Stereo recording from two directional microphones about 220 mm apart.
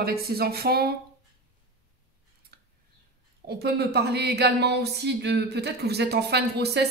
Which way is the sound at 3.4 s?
45° right (ahead or behind).